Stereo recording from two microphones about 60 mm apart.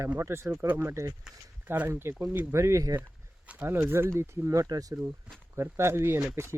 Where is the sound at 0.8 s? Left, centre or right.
Right.